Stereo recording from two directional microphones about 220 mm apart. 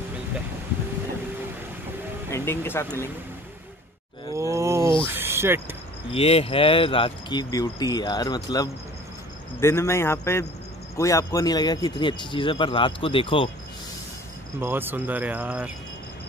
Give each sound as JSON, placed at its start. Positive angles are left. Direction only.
{"t": 2.3, "sound": "speech", "side_deg": 10}
{"t": 4.4, "sound": "groan", "side_deg": -15}
{"t": 5.0, "sound": "speech", "side_deg": -10}
{"t": 6.1, "sound": "a man's voice", "side_deg": 25}
{"t": 14.6, "sound": "speech", "side_deg": -10}